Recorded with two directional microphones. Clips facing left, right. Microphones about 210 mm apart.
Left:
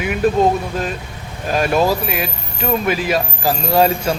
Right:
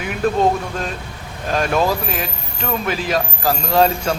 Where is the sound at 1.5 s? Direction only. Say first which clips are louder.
Left 2 dB; 10° left (ahead or behind).